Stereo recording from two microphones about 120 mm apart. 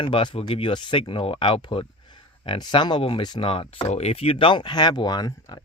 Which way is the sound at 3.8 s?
60° left (ahead or behind).